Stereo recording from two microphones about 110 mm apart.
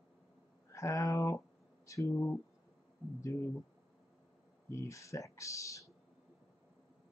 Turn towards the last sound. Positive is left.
turn(degrees=30)  # may be behind; listen again after turning